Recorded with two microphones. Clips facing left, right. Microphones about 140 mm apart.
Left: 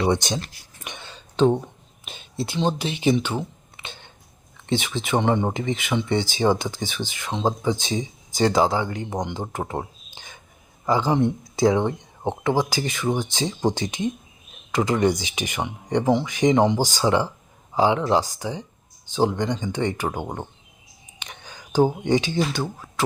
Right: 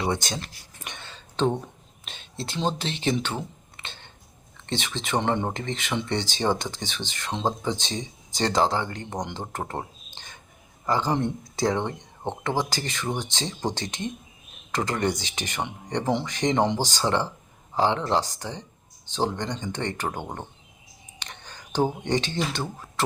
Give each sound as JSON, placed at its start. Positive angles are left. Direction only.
{"t": 0.1, "sound": "speech", "side_deg": 20}
{"t": 0.9, "sound": "a sound", "side_deg": 15}
{"t": 2.4, "sound": "speech", "side_deg": 5}